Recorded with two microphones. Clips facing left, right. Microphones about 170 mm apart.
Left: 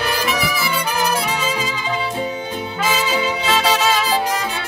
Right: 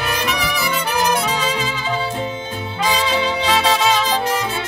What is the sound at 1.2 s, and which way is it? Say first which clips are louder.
Music: right 1 dB; 10° left (ahead or behind).